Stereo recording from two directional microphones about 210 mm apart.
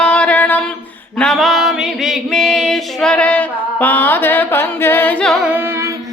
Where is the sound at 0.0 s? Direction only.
5° left (ahead or behind); by 5.9 s 10° right (ahead or behind).